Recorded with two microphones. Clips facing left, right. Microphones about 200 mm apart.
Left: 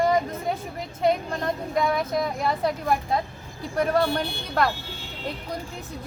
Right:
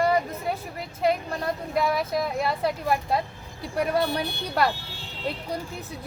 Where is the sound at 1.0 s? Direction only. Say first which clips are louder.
Left 1 dB; 5° right (ahead or behind).